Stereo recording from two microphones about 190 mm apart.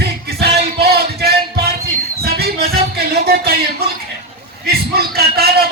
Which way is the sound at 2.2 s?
55° right (ahead or behind).